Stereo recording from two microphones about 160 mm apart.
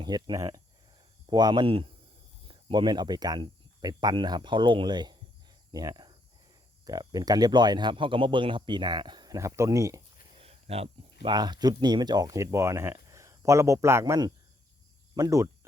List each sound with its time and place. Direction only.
0.0 s speech: 25° right (ahead or behind)
10.3 s speech: 40° right (ahead or behind); by 15.4 s 20° right (ahead or behind)